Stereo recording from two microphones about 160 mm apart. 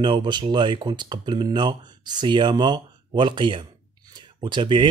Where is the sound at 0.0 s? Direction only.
30° right (ahead or behind).